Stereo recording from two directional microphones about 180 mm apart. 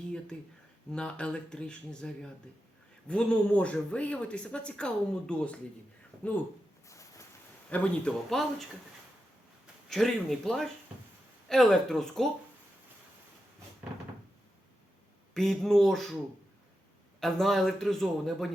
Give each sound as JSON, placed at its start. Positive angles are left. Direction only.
{"t": 0.9, "sound": "a man's voice", "side_deg": 5}
{"t": 3.1, "sound": "speech", "side_deg": 5}
{"t": 6.8, "sound": "a sound", "side_deg": 15}
{"t": 7.7, "sound": "a man's voice", "side_deg": 5}
{"t": 9.9, "sound": "a man's voice", "side_deg": 0}
{"t": 15.4, "sound": "a man's voice", "side_deg": 0}
{"t": 17.2, "sound": "a man's voice", "side_deg": 0}